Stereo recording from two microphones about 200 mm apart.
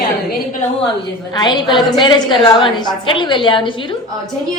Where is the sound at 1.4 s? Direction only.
20° left (ahead or behind).